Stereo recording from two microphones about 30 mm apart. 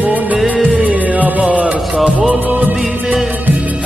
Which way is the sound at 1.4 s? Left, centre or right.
Right.